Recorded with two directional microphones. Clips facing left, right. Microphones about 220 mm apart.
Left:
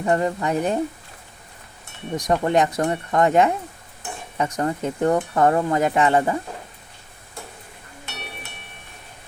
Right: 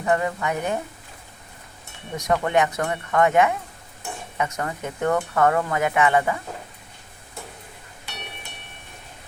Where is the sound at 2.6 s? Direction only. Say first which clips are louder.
Left 2 dB; 35° left (ahead or behind).